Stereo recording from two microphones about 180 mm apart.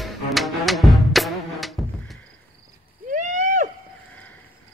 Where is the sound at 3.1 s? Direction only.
45° right (ahead or behind).